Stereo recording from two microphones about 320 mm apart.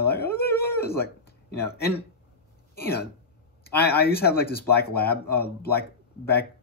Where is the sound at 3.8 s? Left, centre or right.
Left.